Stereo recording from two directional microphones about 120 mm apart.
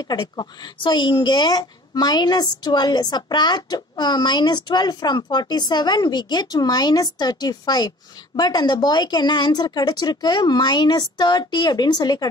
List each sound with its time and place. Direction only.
0.0 s speech: 40° left (ahead or behind)